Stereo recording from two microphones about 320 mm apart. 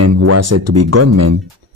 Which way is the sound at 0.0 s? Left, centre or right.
Right.